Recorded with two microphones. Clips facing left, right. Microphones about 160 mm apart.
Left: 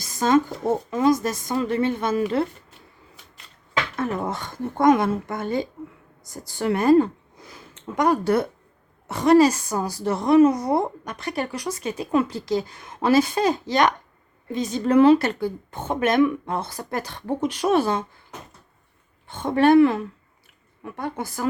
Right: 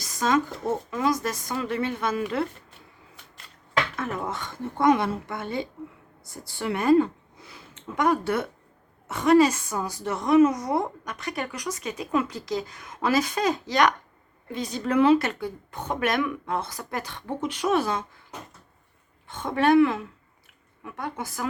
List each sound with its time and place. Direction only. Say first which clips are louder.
0.1 s a sound: left 4 dB; 30° left (ahead or behind)
0.9 s speech: left 7 dB; 30° left (ahead or behind)
3.9 s a woman's voice: left 4 dB; 35° left (ahead or behind)
14.8 s a woman's voice: left 4 dB; 35° left (ahead or behind)
19.3 s a woman's voice: left 4 dB; 30° left (ahead or behind)